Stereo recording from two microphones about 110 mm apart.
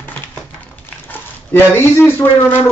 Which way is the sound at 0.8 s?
20° left (ahead or behind).